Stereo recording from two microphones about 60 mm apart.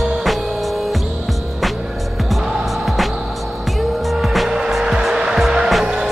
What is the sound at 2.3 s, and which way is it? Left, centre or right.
Music, centre.